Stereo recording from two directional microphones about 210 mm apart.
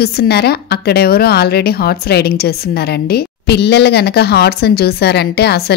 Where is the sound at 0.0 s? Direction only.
50° left (ahead or behind).